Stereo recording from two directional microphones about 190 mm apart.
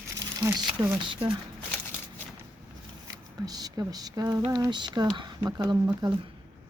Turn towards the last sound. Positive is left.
turn(degrees=-20)  # may be behind; listen again after turning